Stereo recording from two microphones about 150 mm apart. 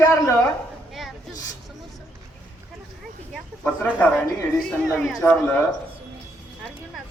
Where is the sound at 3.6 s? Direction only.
10° left (ahead or behind).